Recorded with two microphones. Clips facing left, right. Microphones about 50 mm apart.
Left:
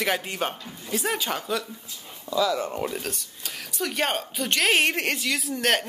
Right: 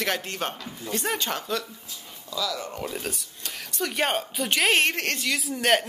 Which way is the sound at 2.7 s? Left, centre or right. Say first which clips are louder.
Left 4 dB; centre.